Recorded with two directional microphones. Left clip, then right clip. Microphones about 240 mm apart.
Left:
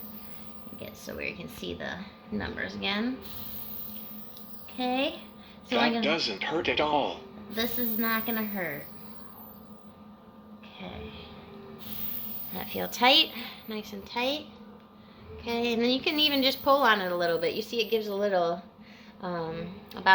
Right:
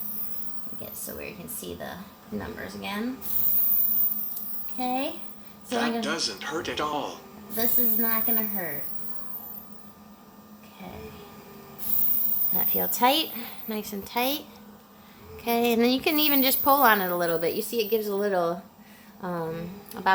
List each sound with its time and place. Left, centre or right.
1.0 s a woman's voice: centre
4.8 s speech: centre
7.5 s a woman's voice: centre
12.5 s a woman's voice: centre; by 14.4 s right
15.4 s a woman's voice: right